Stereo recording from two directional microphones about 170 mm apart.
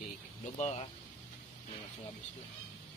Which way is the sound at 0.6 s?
40° left (ahead or behind).